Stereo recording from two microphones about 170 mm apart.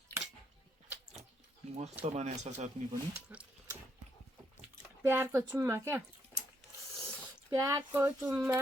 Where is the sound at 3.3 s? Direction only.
5° right (ahead or behind).